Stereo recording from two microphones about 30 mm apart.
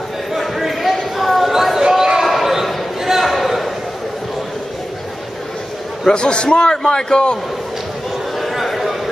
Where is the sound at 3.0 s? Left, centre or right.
Centre.